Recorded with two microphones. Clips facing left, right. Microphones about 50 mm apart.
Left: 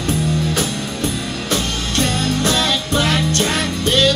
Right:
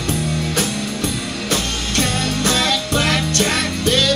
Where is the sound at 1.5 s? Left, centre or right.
Right.